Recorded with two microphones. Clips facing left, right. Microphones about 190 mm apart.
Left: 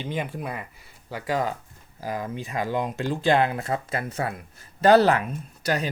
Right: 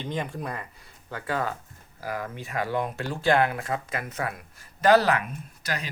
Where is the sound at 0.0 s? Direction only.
5° left (ahead or behind).